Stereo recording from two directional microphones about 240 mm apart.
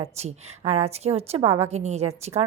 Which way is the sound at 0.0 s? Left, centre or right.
Right.